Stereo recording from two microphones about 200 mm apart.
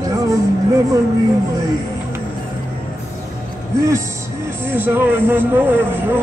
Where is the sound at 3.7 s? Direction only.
15° right (ahead or behind).